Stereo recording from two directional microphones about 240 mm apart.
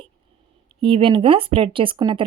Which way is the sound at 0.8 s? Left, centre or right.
Right.